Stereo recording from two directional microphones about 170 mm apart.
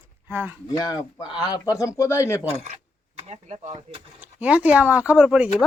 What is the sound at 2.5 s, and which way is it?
Speech, 40° right (ahead or behind).